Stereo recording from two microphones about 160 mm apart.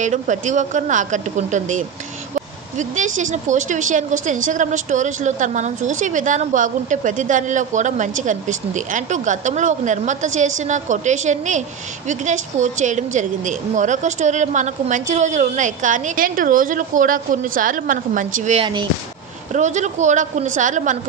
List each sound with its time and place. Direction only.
0.0 s a woman's voice: 50° right (ahead or behind)
18.6 s speech: 30° right (ahead or behind)
19.5 s a woman's voice: 50° right (ahead or behind)